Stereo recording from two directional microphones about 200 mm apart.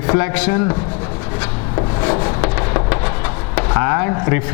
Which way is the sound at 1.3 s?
20° left (ahead or behind).